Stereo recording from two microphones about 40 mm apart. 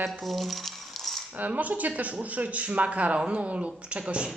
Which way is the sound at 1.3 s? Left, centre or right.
Right.